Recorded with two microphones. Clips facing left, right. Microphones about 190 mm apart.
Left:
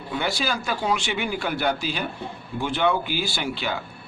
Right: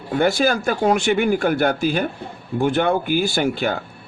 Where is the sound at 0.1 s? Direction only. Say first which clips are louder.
Right 9 dB; 50° right (ahead or behind).